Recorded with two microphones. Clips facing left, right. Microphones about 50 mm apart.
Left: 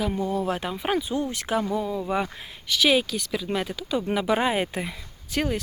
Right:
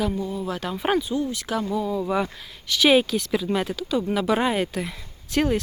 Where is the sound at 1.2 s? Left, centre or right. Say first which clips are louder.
Even; left; by 2.0 s centre.